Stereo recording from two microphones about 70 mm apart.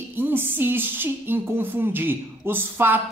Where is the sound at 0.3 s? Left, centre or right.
Right.